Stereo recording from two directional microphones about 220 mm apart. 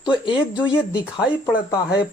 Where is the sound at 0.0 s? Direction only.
20° left (ahead or behind).